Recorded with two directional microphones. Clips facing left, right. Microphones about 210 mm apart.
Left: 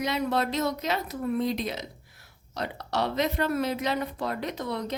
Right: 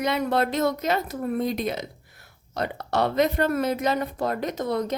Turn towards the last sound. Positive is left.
turn(degrees=-45)  # may be behind; listen again after turning